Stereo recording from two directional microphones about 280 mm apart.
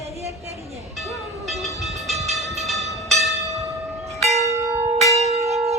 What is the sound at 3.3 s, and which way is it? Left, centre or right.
Church bell, centre.